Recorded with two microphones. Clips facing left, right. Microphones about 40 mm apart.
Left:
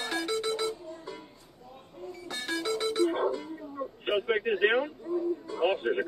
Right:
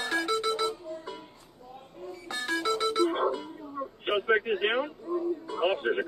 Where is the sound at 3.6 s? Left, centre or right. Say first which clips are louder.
Even; centre.